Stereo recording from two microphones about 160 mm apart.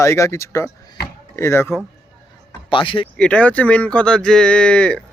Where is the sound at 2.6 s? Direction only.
30° left (ahead or behind).